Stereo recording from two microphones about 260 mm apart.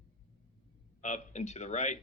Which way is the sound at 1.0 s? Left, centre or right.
Left.